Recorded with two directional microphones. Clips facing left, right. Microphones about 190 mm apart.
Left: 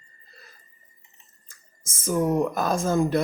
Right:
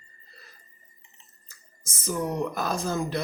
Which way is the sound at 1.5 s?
50° left (ahead or behind).